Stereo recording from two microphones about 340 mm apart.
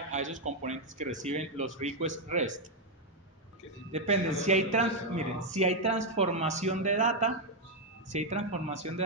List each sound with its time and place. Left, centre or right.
0.1 s speech: right
3.9 s a man's voice: centre